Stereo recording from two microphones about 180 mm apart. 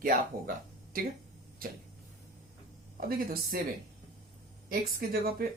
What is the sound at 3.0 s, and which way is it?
Speech, 55° right (ahead or behind).